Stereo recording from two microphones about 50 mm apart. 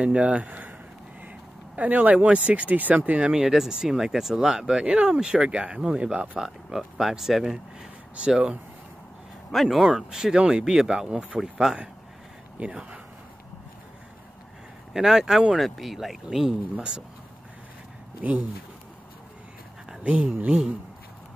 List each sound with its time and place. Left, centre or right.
0.0 s speech: right
1.8 s speech: right
3.2 s speech: centre
4.8 s speech: right
7.0 s speech: centre
9.5 s speech: centre
9.8 s speech: centre
14.9 s speech: centre
18.2 s speech: right
20.0 s speech: right